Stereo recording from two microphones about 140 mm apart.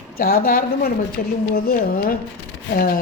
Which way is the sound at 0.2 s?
90° left.